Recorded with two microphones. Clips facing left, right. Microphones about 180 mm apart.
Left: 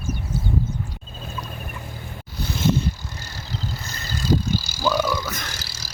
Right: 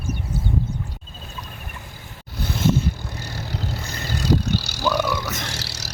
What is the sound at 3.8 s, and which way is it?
Vehicle, 65° right (ahead or behind).